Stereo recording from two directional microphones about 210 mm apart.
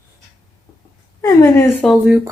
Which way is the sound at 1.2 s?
15° left (ahead or behind).